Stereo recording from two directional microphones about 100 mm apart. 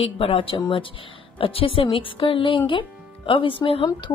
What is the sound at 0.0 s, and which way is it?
A woman's voice, 75° left (ahead or behind).